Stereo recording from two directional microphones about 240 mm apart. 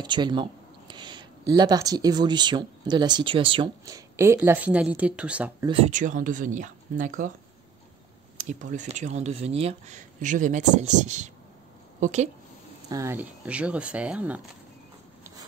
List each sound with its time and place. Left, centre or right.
0.0 s a sound: centre
1.5 s speech: centre
5.7 s speech: right
8.4 s speech: right
12.9 s speech: centre